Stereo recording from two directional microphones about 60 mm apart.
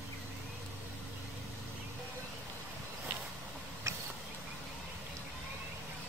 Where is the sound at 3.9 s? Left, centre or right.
Right.